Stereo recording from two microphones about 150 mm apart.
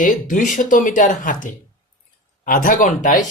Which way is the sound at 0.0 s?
60° left (ahead or behind).